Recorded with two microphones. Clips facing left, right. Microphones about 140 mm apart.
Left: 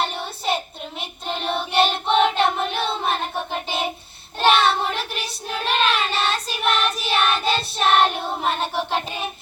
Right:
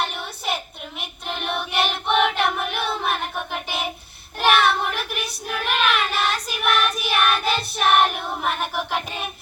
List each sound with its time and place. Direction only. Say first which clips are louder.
0.0 s child singing: left 2 dB; 30° left (ahead or behind)